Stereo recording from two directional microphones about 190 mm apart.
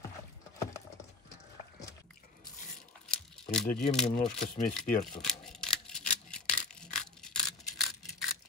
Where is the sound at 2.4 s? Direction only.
45° left (ahead or behind).